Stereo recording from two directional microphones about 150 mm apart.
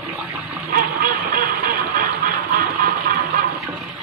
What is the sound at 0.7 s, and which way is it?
Music, 70° right (ahead or behind).